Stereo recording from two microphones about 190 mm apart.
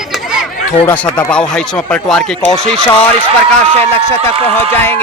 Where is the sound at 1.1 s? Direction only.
5° left (ahead or behind).